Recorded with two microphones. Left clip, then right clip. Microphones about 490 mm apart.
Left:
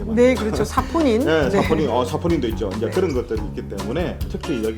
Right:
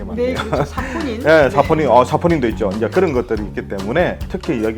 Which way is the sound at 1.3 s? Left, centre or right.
Right.